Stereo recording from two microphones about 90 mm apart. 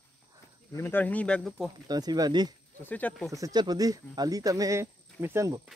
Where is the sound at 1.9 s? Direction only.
45° right (ahead or behind).